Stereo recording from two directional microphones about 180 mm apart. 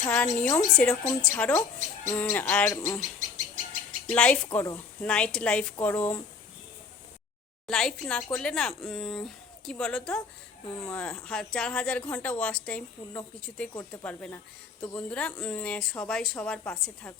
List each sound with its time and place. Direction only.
0.0 s a woman's voice: 10° left (ahead or behind)
3.2 s bird: 45° right (ahead or behind)
4.1 s a woman's voice: 5° left (ahead or behind)
4.5 s a woman's voice: 20° left (ahead or behind)
5.0 s a woman's voice: 5° left (ahead or behind)
7.7 s speech: 5° left (ahead or behind)
10.8 s a woman's voice: 15° left (ahead or behind)
11.0 s a woman's voice: 5° left (ahead or behind)